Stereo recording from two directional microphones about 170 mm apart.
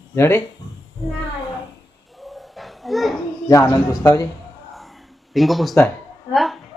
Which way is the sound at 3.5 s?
15° left (ahead or behind).